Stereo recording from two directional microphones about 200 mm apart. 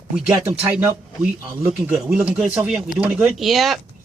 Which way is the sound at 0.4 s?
5° right (ahead or behind).